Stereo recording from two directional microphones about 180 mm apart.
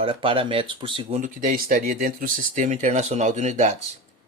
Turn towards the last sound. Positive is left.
turn(degrees=-40)  # may be behind; listen again after turning